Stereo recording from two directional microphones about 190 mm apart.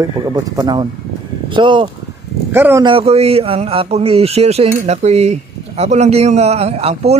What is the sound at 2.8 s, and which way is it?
A man's voice, 30° right (ahead or behind).